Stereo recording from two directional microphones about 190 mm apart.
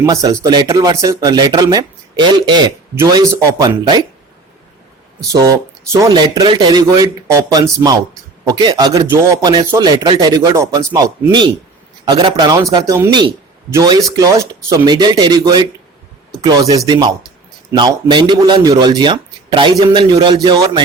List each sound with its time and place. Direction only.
0.0 s speech: 20° right (ahead or behind)
5.3 s speech: 15° right (ahead or behind)